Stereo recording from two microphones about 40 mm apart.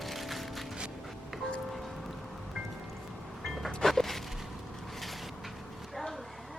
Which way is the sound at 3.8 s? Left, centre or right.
Centre.